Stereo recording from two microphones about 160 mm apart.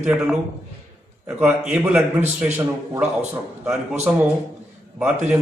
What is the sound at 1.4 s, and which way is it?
Speech, 5° right (ahead or behind).